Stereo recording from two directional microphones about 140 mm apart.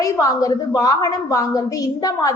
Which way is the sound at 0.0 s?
25° left (ahead or behind).